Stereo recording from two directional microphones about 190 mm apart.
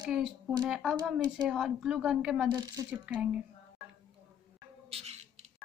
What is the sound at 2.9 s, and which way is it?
Speech, 5° right (ahead or behind).